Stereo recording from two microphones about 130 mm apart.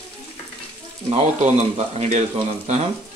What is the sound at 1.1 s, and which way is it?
Speech, 60° right (ahead or behind).